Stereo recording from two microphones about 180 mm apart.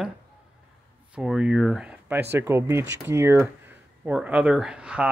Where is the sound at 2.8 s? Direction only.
75° right (ahead or behind).